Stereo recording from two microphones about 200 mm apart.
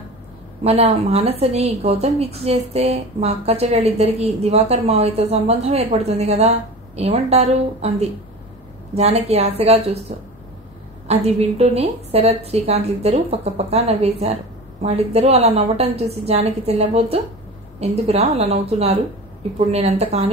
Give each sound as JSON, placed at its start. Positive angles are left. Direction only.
{"t": 0.7, "sound": "a woman's voice", "side_deg": -30}